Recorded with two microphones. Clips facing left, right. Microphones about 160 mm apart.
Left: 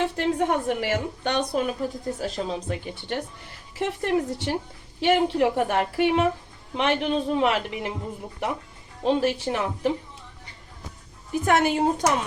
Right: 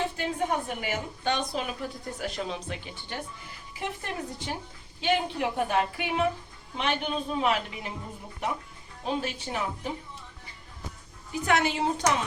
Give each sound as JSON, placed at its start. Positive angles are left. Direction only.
{"t": 0.0, "sound": "a woman's voice", "side_deg": 65}
{"t": 1.4, "sound": "speech", "side_deg": 45}
{"t": 3.8, "sound": "a woman's voice", "side_deg": 80}
{"t": 9.0, "sound": "speech", "side_deg": 80}
{"t": 11.4, "sound": "speech", "side_deg": 50}